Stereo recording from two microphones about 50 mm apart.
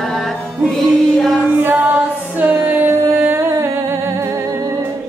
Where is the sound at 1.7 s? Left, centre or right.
Right.